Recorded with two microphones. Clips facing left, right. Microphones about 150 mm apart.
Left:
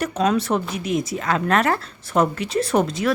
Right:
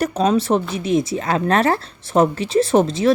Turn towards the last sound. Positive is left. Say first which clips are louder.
# right 5 dB
turn(degrees=-25)  # may be behind; listen again after turning